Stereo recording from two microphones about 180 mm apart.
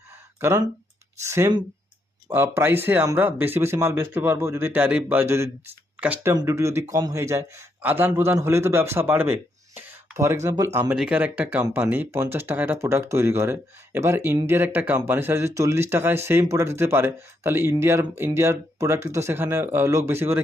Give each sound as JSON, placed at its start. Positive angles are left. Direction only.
{"t": 0.3, "sound": "a man's voice", "side_deg": -15}